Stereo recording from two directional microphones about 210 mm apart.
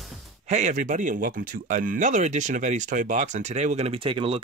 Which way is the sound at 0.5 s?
35° right (ahead or behind).